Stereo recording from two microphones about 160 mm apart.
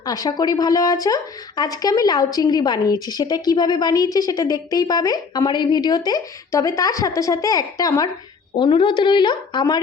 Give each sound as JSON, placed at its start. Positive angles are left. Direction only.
{"t": 0.0, "sound": "speech", "side_deg": 25}